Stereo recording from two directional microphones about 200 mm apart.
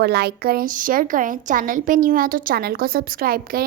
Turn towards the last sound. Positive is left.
turn(degrees=-45)  # may be behind; listen again after turning